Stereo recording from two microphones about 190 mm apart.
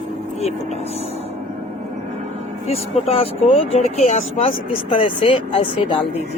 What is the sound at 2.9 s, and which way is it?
Speech, 30° left (ahead or behind).